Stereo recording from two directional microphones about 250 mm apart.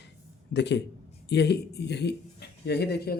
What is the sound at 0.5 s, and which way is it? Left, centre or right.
A man's voice, left.